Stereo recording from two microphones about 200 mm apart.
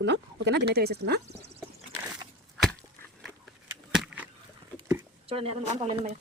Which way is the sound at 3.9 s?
Centre (ahead or behind).